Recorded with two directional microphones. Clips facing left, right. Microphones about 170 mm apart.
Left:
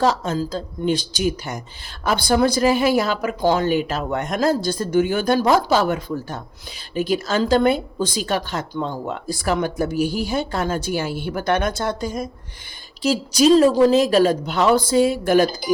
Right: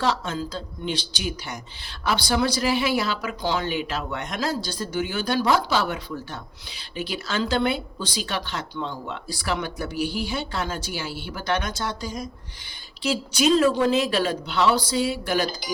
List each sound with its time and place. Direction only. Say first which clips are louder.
0.0 s speech: left 5 dB; 40° left (ahead or behind)
13.0 s speech: left 6 dB; 40° left (ahead or behind)